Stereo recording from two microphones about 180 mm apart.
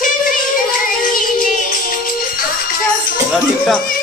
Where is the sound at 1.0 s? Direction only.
50° left (ahead or behind).